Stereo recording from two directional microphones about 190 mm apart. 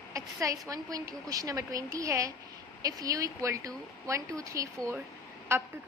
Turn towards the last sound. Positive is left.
turn(degrees=-15)  # may be behind; listen again after turning